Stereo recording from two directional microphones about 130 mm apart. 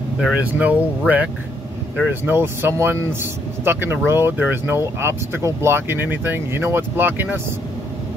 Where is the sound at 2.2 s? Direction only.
15° right (ahead or behind).